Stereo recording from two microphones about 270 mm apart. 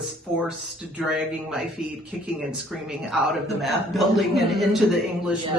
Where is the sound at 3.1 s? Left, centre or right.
Centre.